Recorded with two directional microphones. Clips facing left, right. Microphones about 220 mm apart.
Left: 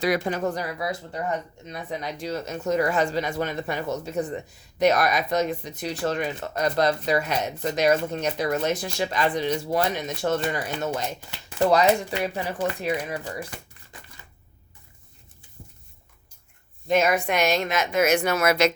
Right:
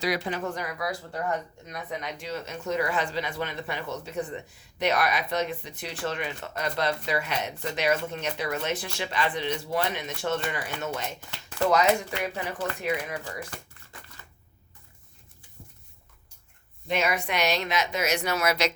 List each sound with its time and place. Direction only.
0.0 s speech: 50° left (ahead or behind)
11.3 s speech: 10° left (ahead or behind)
11.7 s speech: 35° left (ahead or behind)
13.5 s crushing: 15° left (ahead or behind)
16.9 s a woman's voice: 45° left (ahead or behind)